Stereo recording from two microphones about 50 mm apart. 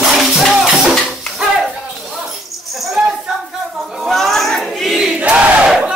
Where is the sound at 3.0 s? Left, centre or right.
Right.